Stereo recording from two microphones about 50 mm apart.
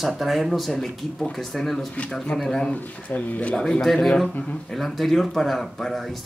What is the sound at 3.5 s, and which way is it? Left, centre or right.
Speech, centre.